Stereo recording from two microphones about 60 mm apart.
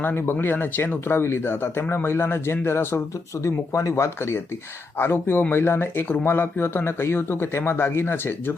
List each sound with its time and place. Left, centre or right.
0.0 s speech: left
3.4 s speech: left